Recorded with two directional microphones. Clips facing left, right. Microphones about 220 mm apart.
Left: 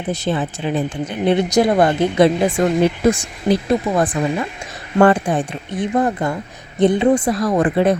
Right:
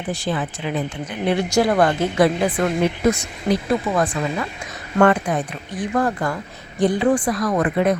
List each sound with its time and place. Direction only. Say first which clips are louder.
0.1 s speech: left 4 dB; 25° left (ahead or behind)